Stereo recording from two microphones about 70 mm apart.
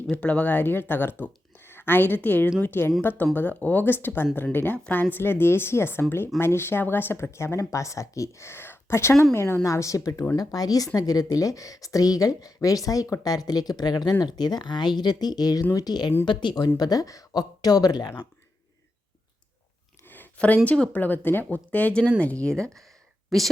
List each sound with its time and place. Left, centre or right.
0.1 s speech: centre; by 16.0 s left
16.2 s speech: left
16.6 s speech: left
20.1 s a sound: left
20.7 s speech: centre
23.3 s speech: centre